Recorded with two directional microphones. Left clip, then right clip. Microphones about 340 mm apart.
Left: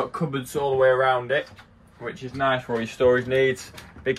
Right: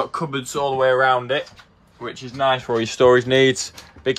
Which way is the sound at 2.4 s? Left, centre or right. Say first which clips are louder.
Right 4 dB; right.